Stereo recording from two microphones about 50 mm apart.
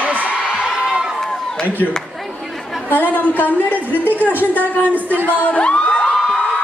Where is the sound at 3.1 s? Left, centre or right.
Left.